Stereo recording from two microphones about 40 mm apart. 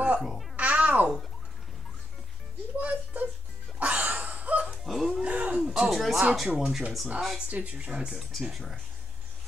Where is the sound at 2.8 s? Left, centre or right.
Right.